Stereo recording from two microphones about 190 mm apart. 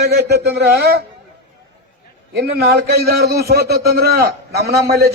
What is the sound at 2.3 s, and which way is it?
A man's voice, 55° right (ahead or behind).